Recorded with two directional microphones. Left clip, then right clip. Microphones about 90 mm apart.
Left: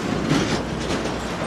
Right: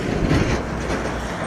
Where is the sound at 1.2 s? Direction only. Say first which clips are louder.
Even; centre (ahead or behind).